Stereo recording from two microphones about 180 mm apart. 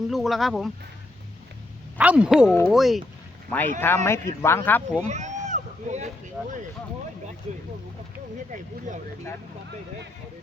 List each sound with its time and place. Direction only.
0.1 s speech: centre (ahead or behind)
2.0 s speech: 5° right (ahead or behind)
3.5 s speech: 10° left (ahead or behind)
5.0 s a sound: 40° right (ahead or behind)
6.4 s speech: 5° right (ahead or behind)